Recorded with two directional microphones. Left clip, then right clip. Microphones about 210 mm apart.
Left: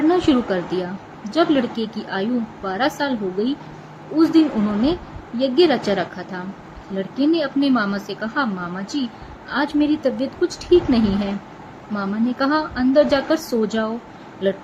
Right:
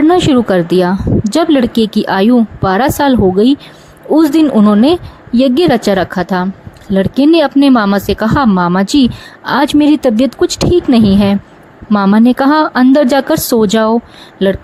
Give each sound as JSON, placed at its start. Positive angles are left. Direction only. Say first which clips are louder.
{"t": 0.1, "sound": "speech", "louder": "right 9 dB", "side_deg": -50}